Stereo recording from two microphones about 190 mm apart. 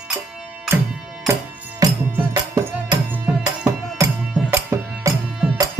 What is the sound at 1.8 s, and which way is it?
Music, 10° right (ahead or behind).